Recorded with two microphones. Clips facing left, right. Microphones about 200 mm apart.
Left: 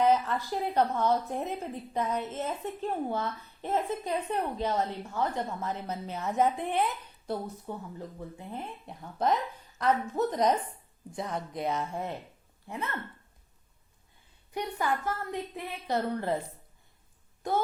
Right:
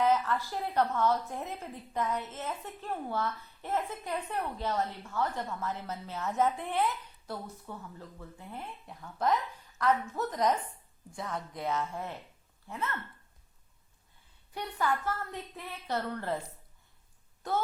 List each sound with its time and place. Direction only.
0.0 s a woman's voice: 20° left (ahead or behind)
14.5 s a woman's voice: 15° left (ahead or behind)
17.4 s a woman's voice: 15° left (ahead or behind)